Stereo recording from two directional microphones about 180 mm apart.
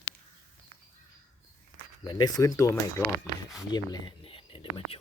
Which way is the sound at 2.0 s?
20° left (ahead or behind).